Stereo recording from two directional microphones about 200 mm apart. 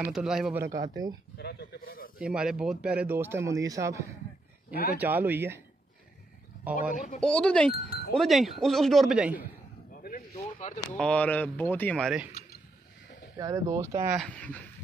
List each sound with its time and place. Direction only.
0.0 s wind chime: 5° right (ahead or behind)
1.4 s a man's voice: 55° left (ahead or behind)
2.1 s speech: 5° right (ahead or behind)
7.2 s wind chime: 5° left (ahead or behind)
10.3 s a sound: 35° left (ahead or behind)
11.0 s speech: 5° left (ahead or behind)
13.4 s speech: 15° right (ahead or behind)
14.1 s wind chime: 5° left (ahead or behind)